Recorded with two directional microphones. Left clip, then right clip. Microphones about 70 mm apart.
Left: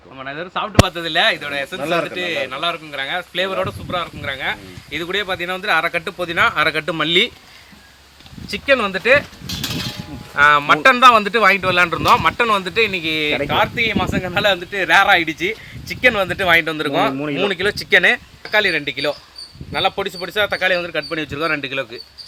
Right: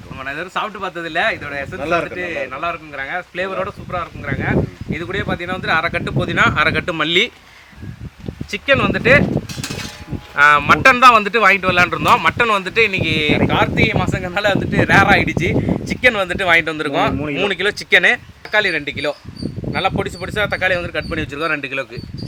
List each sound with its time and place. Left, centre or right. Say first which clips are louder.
0.2 s speech: right 2 dB; centre
0.9 s speech: left 2 dB; centre
1.8 s a man's voice: right 2 dB; right
2.0 s a man's voice: left 1 dB; left; by 7.3 s centre
8.4 s a sound: right 1 dB; centre
10.3 s speech: right 1 dB; centre